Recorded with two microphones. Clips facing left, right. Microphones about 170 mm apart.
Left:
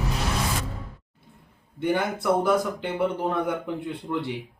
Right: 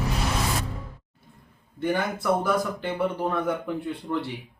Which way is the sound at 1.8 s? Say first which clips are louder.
Left 1 dB; 20° left (ahead or behind).